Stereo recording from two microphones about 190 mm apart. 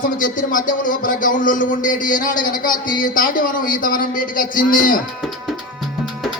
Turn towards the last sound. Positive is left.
turn(degrees=45)  # may be behind; listen again after turning